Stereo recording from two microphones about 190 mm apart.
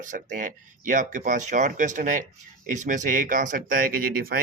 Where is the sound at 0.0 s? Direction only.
45° right (ahead or behind).